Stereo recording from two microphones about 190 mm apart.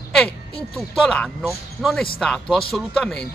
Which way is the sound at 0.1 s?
5° left (ahead or behind).